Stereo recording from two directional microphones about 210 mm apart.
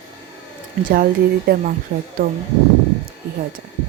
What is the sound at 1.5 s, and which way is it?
Speech, 45° right (ahead or behind).